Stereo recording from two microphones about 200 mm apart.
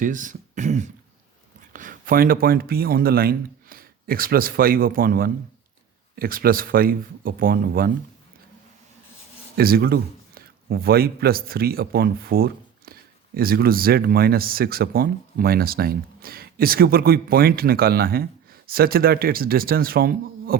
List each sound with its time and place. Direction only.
0.0 s speech: 40° right (ahead or behind)
9.6 s a man's voice: 50° right (ahead or behind)